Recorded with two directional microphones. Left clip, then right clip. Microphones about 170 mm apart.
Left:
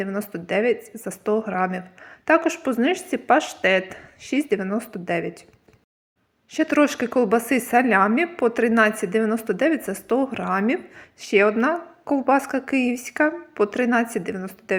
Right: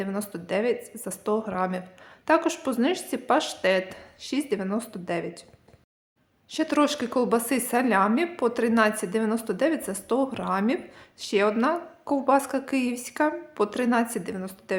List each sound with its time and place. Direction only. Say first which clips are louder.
0.0 s speech: left 4 dB; 15° left (ahead or behind)
6.5 s speech: left 4 dB; 15° left (ahead or behind)